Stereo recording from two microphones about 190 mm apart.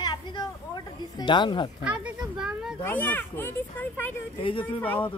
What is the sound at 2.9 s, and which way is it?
Speech, 10° left (ahead or behind).